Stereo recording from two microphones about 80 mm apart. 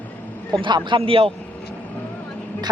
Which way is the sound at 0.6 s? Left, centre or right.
Right.